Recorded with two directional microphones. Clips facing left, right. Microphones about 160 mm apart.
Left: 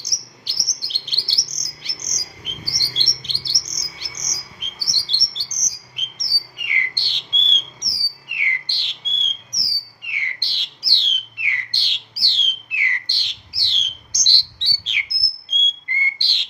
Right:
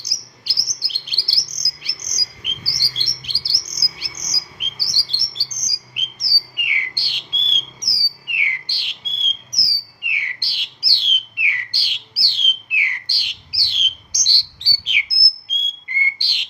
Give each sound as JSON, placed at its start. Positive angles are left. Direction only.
{"t": 0.1, "sound": "bird", "side_deg": -10}
{"t": 2.5, "sound": "chirp", "side_deg": -10}
{"t": 3.0, "sound": "bird", "side_deg": -10}